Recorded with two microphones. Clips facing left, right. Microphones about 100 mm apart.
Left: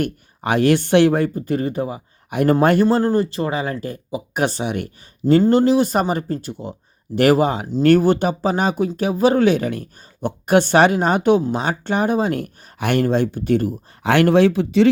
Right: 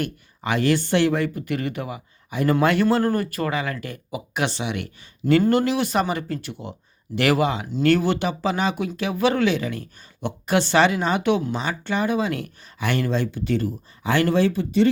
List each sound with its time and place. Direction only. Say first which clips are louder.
0.0 s speech: left 5 dB; 50° left (ahead or behind)
1.4 s speech: left 5 dB; 35° left (ahead or behind)
2.3 s speech: left 5 dB; 55° left (ahead or behind)
2.6 s speech: left 3 dB; 40° left (ahead or behind)
5.2 s speech: left 4 dB; 30° left (ahead or behind); by 13.7 s 55° left (ahead or behind)
14.0 s speech: left 6 dB; 70° left (ahead or behind); by 14.8 s 90° left